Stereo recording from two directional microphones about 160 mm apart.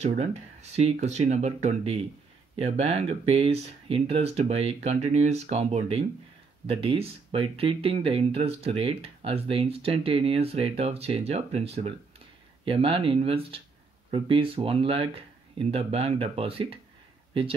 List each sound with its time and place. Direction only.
0.2 s speech: 40° right (ahead or behind)